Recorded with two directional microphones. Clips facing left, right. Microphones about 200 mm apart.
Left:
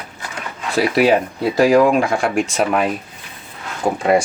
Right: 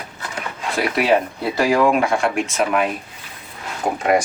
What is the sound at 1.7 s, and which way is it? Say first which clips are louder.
Speech: left 1 dB; 35° left (ahead or behind).